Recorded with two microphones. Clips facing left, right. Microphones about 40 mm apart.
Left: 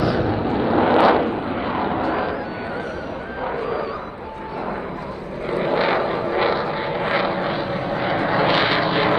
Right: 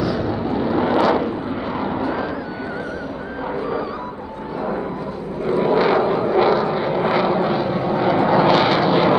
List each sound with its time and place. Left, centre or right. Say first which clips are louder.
0.0 s vehicle: left 1 dB; centre
3.5 s a sound: right 2 dB; centre
5.5 s vehicle: right 3 dB; centre